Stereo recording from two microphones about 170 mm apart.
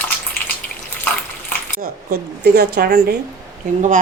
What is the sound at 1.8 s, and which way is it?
A woman's voice, 70° right (ahead or behind).